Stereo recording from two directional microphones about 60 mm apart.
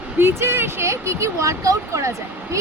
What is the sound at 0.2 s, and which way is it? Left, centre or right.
Speech, right.